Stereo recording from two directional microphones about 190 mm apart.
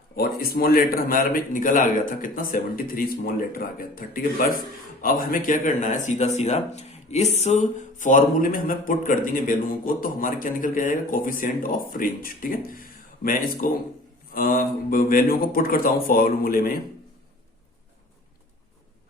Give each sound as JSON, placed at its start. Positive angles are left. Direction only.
{"t": 0.2, "sound": "speech", "side_deg": 55}